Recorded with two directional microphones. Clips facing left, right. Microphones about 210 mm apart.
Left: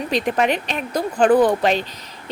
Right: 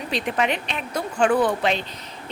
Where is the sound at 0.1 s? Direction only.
45° left (ahead or behind).